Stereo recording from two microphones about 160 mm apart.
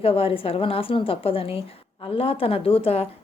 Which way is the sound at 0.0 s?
35° left (ahead or behind).